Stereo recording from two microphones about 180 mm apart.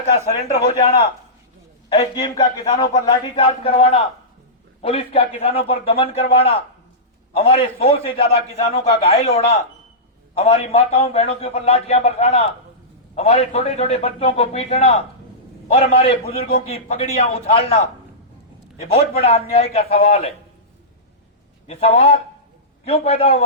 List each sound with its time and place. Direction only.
0.4 s a man's voice: 35° left (ahead or behind)
16.2 s a man's voice: 55° left (ahead or behind)
16.7 s a man's voice: 35° left (ahead or behind)
21.7 s a man's voice: 35° left (ahead or behind)